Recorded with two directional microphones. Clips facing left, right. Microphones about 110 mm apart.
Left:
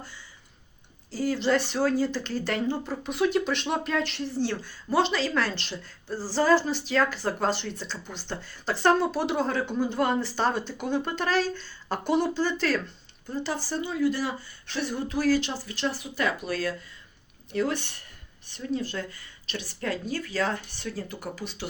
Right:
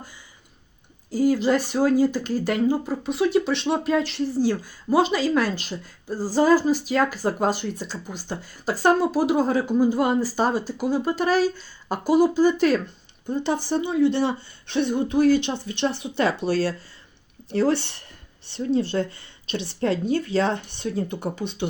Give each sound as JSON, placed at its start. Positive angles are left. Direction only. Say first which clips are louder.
{"t": 1.1, "sound": "speech", "louder": "right 5 dB", "side_deg": -10}